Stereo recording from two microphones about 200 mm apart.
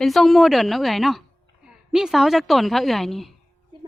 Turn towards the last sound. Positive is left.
turn(degrees=0)  # may be behind; listen again after turning